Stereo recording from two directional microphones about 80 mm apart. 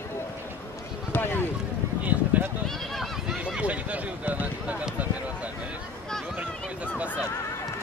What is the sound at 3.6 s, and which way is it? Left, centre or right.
Run, centre.